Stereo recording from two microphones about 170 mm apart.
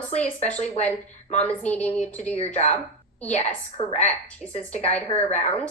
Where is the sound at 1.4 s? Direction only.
10° left (ahead or behind).